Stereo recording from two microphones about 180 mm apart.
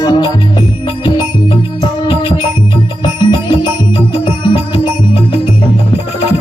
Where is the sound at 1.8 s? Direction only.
20° left (ahead or behind).